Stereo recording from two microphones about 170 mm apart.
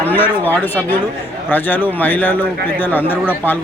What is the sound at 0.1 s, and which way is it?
Speech, 10° left (ahead or behind).